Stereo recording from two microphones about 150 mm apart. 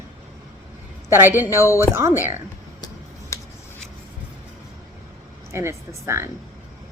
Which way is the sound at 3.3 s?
20° left (ahead or behind).